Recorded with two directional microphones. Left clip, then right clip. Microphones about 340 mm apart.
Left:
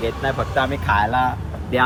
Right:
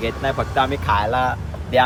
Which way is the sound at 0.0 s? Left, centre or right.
Centre.